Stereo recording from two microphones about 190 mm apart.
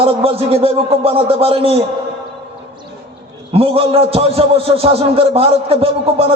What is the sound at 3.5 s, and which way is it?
A man's voice, 30° right (ahead or behind).